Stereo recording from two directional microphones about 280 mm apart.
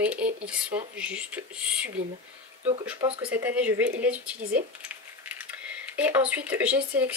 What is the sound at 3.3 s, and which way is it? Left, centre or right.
Speech, centre.